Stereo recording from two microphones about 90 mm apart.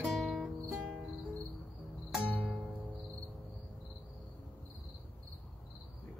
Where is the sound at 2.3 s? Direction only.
15° left (ahead or behind).